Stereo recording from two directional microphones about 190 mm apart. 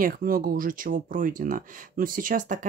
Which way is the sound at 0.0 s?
50° right (ahead or behind).